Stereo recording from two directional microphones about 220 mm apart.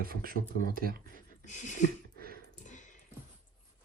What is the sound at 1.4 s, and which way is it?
Speech, 35° left (ahead or behind).